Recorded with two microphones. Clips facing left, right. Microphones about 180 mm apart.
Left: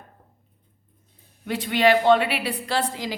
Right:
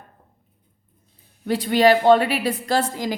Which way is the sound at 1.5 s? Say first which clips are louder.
Right 4 dB; 35° right (ahead or behind).